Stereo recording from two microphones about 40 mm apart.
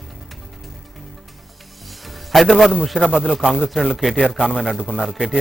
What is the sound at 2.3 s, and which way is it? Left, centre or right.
Speech, centre.